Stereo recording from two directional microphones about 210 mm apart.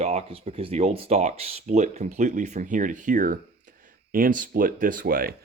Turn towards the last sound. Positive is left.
turn(degrees=-45)  # may be behind; listen again after turning